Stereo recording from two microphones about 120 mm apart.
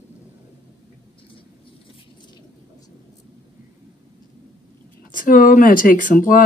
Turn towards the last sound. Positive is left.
turn(degrees=90)